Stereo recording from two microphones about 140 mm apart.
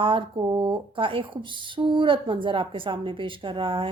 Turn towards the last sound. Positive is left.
turn(degrees=-35)  # may be behind; listen again after turning